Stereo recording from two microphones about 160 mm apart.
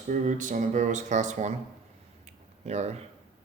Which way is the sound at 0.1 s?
55° right (ahead or behind).